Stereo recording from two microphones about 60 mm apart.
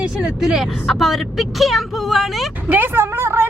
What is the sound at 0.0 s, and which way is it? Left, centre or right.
Speech, centre.